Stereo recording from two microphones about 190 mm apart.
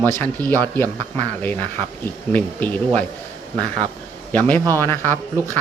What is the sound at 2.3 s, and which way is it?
Speech, 10° left (ahead or behind).